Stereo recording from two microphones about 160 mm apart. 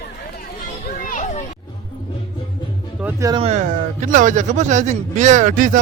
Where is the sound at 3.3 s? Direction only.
40° right (ahead or behind).